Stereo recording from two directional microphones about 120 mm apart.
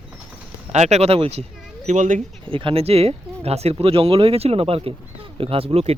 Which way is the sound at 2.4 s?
45° right (ahead or behind).